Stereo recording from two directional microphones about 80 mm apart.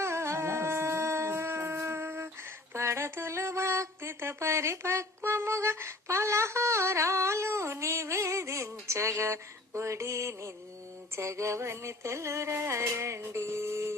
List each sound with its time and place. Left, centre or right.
0.0 s shofar: right
2.7 s a sound: right
11.1 s music: right